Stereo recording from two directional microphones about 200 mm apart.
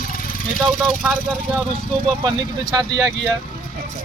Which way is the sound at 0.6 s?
Centre (ahead or behind).